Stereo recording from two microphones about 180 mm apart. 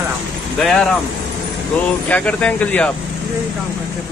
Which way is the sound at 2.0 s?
5° left (ahead or behind).